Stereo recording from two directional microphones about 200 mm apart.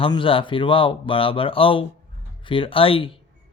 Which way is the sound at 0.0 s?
25° left (ahead or behind).